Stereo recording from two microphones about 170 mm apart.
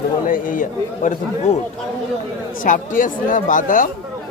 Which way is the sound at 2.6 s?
50° left (ahead or behind).